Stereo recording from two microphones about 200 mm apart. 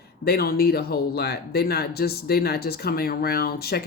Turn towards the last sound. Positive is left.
turn(degrees=50)  # may be behind; listen again after turning